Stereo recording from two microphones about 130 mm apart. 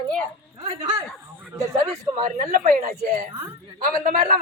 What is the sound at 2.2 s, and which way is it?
Speech, 60° right (ahead or behind).